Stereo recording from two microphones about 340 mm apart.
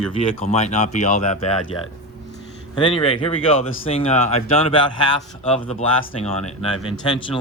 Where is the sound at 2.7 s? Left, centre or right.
Centre.